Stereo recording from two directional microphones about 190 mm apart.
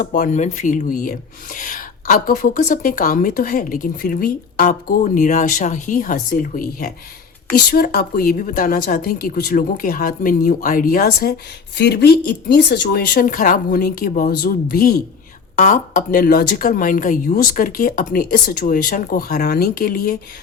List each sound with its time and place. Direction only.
0.0 s speech: 45° left (ahead or behind)
15.5 s speech: 40° left (ahead or behind)